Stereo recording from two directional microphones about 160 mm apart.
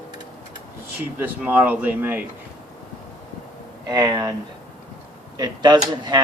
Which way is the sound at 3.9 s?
25° right (ahead or behind).